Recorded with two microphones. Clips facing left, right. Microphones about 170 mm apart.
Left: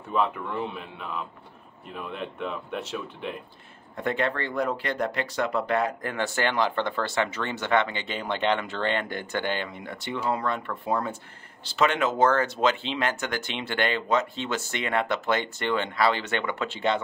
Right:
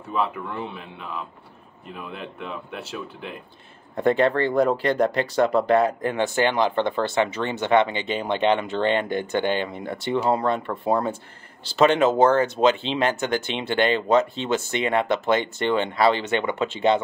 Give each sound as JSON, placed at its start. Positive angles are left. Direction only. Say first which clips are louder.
{"t": 0.1, "sound": "speech", "louder": "even", "side_deg": 0}
{"t": 3.9, "sound": "speech", "louder": "right 8 dB", "side_deg": -35}